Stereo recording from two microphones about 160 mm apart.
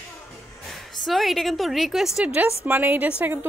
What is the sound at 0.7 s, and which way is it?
A woman's voice, centre (ahead or behind).